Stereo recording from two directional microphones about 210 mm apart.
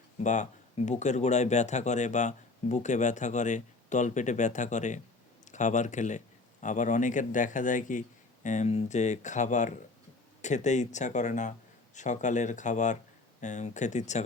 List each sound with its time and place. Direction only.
0.2 s speech: 35° left (ahead or behind)